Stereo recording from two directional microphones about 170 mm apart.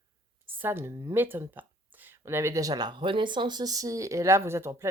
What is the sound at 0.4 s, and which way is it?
Speech, 10° right (ahead or behind).